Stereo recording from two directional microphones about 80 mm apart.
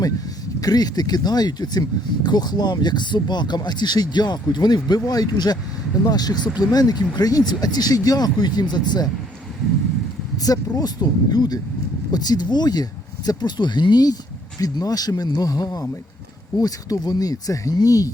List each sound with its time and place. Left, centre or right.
0.6 s speech: left
10.3 s speech: left